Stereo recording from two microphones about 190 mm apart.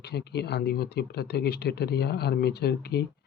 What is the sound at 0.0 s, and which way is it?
Speech, 60° left (ahead or behind).